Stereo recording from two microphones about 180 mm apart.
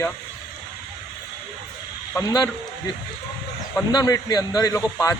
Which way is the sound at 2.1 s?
20° left (ahead or behind).